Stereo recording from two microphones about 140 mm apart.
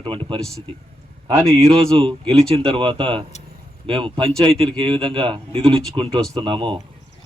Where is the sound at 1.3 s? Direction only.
25° right (ahead or behind).